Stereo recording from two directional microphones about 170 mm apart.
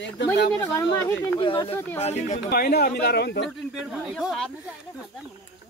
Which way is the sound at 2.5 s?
60° left (ahead or behind).